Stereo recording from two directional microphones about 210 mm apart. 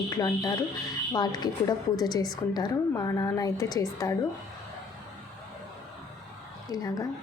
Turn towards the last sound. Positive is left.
turn(degrees=15)  # may be behind; listen again after turning